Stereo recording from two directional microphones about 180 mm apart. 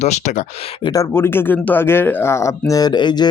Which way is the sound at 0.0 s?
40° left (ahead or behind).